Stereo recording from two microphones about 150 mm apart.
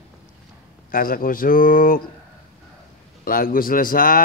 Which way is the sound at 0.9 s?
70° left (ahead or behind).